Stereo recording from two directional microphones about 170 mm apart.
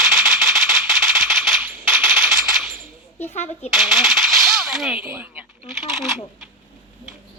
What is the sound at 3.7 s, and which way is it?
Speech, centre (ahead or behind).